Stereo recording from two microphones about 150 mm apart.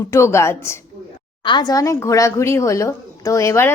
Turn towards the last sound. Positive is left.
turn(degrees=20)  # may be behind; listen again after turning